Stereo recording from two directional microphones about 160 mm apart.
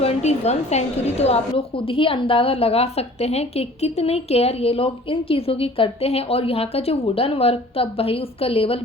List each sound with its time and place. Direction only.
0.0 s a woman's voice: 40° left (ahead or behind)